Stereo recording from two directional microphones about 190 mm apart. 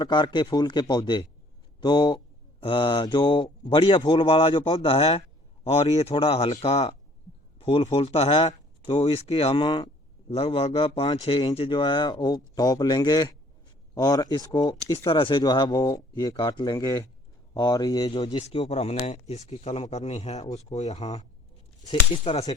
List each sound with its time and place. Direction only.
0.0 s speech: 25° left (ahead or behind)